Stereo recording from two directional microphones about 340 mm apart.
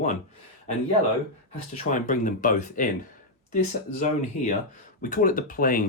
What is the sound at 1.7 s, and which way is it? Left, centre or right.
Speech, left.